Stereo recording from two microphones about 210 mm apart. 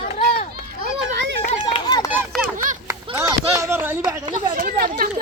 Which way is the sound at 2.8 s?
15° right (ahead or behind).